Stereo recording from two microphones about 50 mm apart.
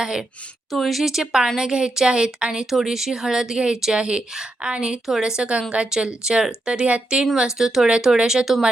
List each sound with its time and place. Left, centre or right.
0.0 s speech: centre
0.7 s speech: centre
5.0 s speech: centre
5.4 s speech: right
7.3 s speech: centre